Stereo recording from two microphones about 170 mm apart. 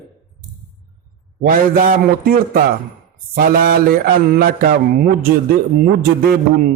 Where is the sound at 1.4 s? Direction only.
55° right (ahead or behind).